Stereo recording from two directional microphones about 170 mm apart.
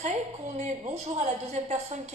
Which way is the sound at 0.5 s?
45° right (ahead or behind).